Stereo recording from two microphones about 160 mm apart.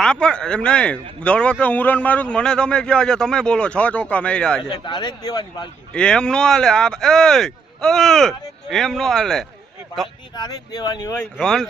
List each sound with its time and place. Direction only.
0.0 s speech: 5° left (ahead or behind)
4.7 s speech: 30° left (ahead or behind)
5.9 s speech: 5° left (ahead or behind)
10.3 s speech: 25° left (ahead or behind)
11.3 s speech: 5° left (ahead or behind)